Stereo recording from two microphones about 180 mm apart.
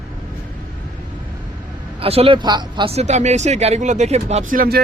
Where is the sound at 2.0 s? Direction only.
30° right (ahead or behind); by 4.8 s 55° right (ahead or behind).